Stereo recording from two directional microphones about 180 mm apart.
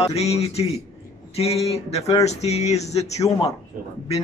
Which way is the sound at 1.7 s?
35° left (ahead or behind).